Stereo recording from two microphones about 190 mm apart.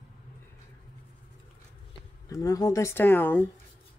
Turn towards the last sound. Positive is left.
turn(degrees=10)  # may be behind; listen again after turning